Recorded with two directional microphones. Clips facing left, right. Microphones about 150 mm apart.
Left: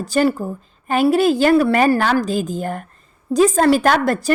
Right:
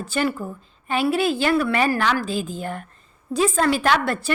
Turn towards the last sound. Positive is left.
turn(degrees=40)  # may be behind; listen again after turning